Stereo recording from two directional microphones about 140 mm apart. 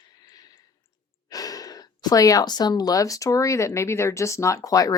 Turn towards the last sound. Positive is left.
turn(degrees=25)  # may be behind; listen again after turning